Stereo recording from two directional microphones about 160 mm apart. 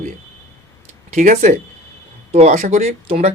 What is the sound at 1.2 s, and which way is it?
A man's voice, 45° right (ahead or behind).